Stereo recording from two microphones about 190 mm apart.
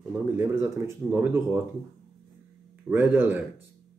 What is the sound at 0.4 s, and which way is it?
Speech, 15° right (ahead or behind).